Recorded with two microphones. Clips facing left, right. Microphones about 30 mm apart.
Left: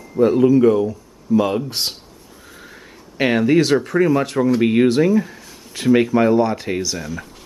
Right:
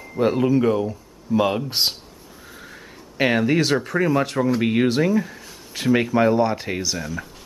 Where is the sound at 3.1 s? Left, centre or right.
Centre.